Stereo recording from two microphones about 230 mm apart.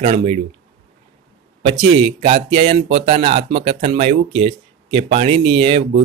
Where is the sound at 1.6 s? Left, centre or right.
Right.